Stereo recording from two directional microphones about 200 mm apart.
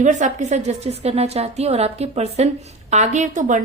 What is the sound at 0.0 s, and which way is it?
A woman's voice, 40° right (ahead or behind).